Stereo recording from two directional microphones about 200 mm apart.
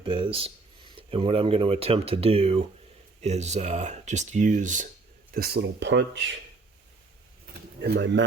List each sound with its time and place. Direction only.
0.0 s speech: 25° right (ahead or behind)
5.3 s speech: 50° right (ahead or behind)
7.9 s speech: 60° right (ahead or behind)